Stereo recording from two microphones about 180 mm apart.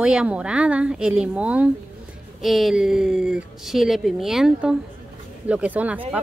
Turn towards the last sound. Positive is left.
turn(degrees=-10)  # may be behind; listen again after turning